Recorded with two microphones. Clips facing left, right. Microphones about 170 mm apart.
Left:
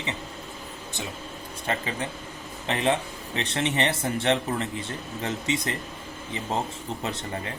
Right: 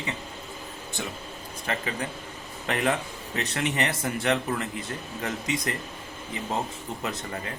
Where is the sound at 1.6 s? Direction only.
30° left (ahead or behind).